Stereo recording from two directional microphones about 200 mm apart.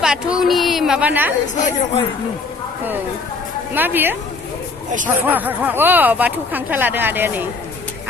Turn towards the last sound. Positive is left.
turn(degrees=-10)  # may be behind; listen again after turning